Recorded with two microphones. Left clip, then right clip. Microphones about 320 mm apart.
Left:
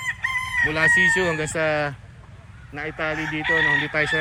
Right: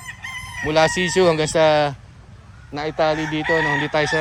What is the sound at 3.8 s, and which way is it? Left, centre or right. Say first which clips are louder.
Speech: right 3 dB; centre.